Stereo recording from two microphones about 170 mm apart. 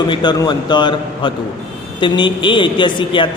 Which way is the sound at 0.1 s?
25° left (ahead or behind).